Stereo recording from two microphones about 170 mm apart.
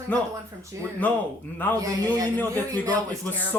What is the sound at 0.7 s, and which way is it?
Speech, 15° right (ahead or behind).